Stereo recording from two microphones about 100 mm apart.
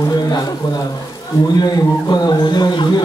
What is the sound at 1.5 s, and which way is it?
A man's voice, 40° left (ahead or behind).